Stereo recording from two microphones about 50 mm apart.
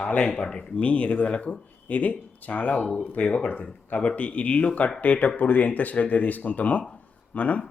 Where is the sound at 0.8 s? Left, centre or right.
Left.